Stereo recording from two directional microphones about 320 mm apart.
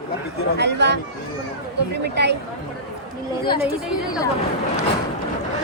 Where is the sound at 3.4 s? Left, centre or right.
Centre.